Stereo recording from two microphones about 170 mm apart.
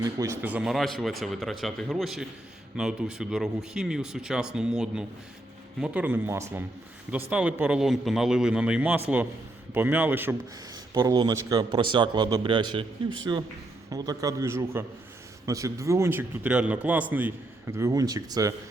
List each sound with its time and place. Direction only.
0.0 s a man's voice: 15° right (ahead or behind)
10.9 s a man's voice: 25° right (ahead or behind)